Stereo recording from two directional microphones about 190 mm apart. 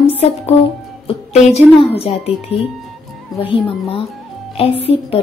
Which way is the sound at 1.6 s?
30° left (ahead or behind).